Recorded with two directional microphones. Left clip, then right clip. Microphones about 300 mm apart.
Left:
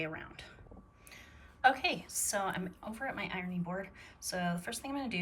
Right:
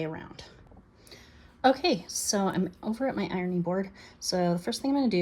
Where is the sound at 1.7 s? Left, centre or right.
Centre.